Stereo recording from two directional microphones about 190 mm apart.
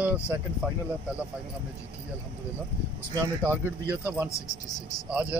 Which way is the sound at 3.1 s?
15° right (ahead or behind).